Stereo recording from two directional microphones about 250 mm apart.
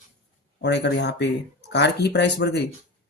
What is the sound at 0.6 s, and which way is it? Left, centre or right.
Speech, left.